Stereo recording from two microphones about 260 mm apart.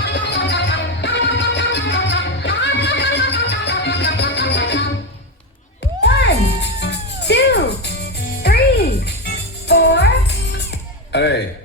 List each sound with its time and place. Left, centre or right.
0.0 s music: left
6.0 s music: left
9.3 s music: left